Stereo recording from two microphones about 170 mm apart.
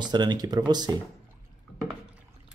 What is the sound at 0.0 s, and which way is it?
Speech, 25° right (ahead or behind).